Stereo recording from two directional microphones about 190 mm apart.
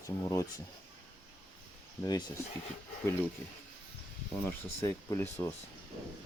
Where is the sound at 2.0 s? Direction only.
20° left (ahead or behind).